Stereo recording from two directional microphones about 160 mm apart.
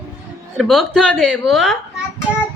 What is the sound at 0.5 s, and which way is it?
Speech, centre (ahead or behind).